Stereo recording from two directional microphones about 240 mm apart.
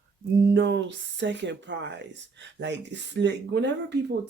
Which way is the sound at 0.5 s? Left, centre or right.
Right.